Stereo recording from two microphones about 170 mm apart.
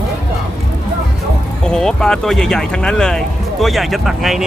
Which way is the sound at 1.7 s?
5° left (ahead or behind).